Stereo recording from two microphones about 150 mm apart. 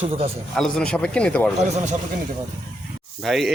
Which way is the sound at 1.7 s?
50° right (ahead or behind).